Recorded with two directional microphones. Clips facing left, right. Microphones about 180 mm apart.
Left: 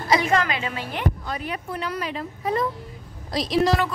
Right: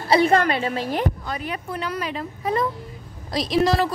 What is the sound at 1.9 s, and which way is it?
Speech, 90° right.